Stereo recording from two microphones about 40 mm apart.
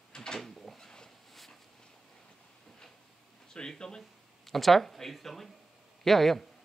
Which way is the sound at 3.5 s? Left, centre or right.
Left.